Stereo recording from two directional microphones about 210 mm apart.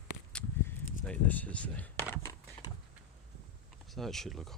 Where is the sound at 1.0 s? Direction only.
5° left (ahead or behind).